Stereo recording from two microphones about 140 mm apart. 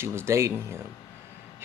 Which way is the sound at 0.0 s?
20° right (ahead or behind).